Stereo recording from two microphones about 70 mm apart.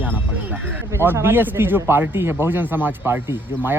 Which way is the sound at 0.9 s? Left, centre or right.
Right.